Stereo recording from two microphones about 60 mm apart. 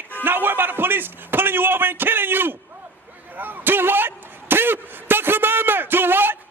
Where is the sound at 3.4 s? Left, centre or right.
Right.